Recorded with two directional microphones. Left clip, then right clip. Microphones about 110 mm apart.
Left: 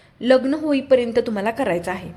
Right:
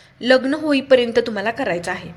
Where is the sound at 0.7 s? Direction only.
10° left (ahead or behind).